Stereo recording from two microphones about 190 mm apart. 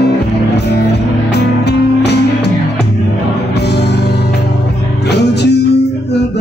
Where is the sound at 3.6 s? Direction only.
60° left (ahead or behind).